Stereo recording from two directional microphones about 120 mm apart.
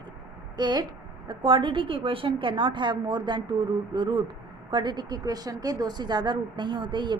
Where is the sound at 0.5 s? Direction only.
35° right (ahead or behind).